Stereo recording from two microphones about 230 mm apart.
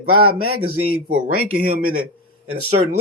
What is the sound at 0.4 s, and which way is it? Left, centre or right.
Speech, right.